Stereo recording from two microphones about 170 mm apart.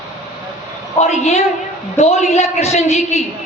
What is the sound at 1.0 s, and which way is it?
A woman's voice, 40° left (ahead or behind).